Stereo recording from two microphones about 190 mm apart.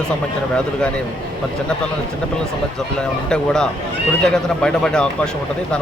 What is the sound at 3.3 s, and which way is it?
Speech, 5° left (ahead or behind).